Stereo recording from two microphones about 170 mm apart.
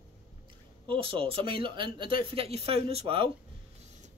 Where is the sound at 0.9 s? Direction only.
30° right (ahead or behind).